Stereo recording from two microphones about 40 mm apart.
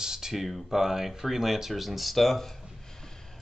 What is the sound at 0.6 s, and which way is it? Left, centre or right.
Speech, centre.